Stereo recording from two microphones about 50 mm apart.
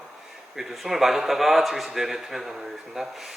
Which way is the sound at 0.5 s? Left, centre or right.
Centre.